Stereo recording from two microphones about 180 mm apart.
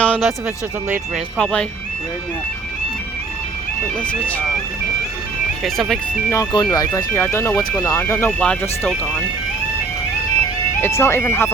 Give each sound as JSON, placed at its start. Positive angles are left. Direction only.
{"t": 0.0, "sound": "music", "side_deg": 5}
{"t": 0.4, "sound": "speech", "side_deg": -10}
{"t": 1.4, "sound": "speech", "side_deg": 5}
{"t": 5.6, "sound": "speech", "side_deg": 0}
{"t": 6.3, "sound": "speech", "side_deg": 20}
{"t": 10.8, "sound": "speech", "side_deg": 15}